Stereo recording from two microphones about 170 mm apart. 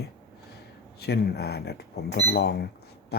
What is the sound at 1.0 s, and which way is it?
Speech, 70° left (ahead or behind).